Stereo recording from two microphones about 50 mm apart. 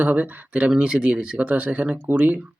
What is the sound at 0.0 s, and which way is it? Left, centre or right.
Speech, right.